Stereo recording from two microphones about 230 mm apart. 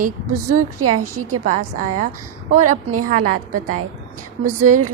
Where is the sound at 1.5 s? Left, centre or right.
Right.